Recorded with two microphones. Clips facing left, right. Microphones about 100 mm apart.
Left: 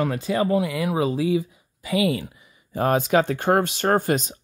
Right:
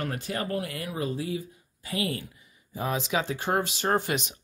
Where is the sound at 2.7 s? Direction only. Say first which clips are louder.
Left 9 dB; 55° left (ahead or behind).